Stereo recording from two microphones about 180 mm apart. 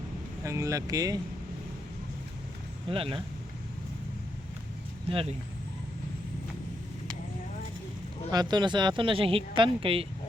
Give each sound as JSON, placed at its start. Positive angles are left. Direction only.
{"t": 0.4, "sound": "speech", "side_deg": -15}
{"t": 2.9, "sound": "speech", "side_deg": -30}
{"t": 5.0, "sound": "speech", "side_deg": -30}
{"t": 8.3, "sound": "speech", "side_deg": -25}